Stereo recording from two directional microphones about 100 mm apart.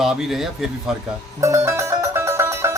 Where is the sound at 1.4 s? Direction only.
25° right (ahead or behind).